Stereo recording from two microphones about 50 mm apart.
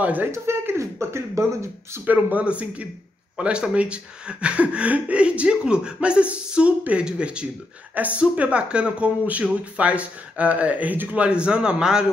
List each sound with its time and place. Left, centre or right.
0.0 s speech: right
0.3 s speech: right
2.1 s speech: right
11.2 s speech: right